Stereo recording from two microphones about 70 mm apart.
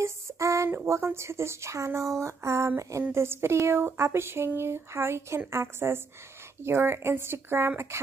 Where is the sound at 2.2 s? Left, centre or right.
Right.